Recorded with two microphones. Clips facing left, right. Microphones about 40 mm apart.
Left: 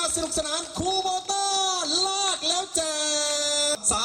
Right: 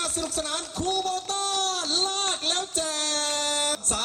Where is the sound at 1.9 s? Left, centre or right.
Left.